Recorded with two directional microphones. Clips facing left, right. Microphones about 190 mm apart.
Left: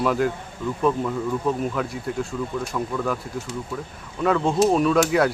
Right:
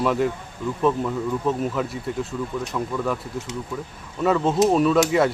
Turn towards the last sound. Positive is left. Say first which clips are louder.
# right 1 dB
turn(degrees=0)  # may be behind; listen again after turning